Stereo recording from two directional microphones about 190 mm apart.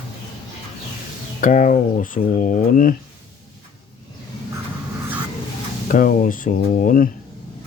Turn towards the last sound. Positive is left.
turn(degrees=45)  # may be behind; listen again after turning